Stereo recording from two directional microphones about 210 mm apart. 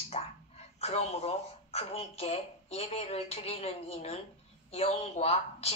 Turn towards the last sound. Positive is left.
turn(degrees=30)  # may be behind; listen again after turning